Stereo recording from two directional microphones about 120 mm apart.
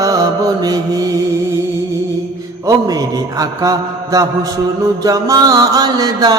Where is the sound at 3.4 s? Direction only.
30° right (ahead or behind).